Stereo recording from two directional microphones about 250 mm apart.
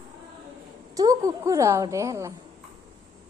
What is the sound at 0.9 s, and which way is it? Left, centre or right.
A woman's voice, centre.